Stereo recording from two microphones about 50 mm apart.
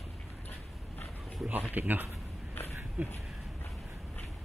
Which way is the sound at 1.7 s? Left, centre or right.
Right.